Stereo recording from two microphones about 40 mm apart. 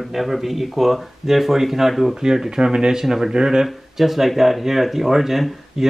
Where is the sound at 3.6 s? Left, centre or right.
Centre.